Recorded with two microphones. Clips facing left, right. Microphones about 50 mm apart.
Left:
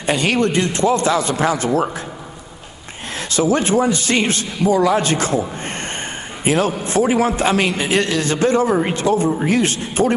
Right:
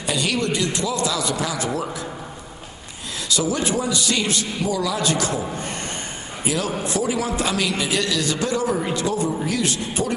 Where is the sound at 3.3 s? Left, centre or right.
Left.